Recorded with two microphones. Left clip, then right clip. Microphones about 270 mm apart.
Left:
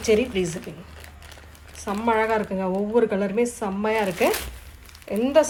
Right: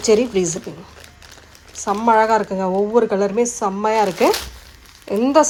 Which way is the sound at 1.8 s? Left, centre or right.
Centre.